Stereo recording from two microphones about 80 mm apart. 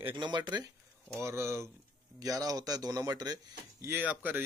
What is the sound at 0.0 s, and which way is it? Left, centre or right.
Speech, right.